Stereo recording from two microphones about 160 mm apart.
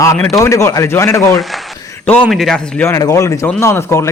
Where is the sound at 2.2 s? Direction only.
Centre (ahead or behind).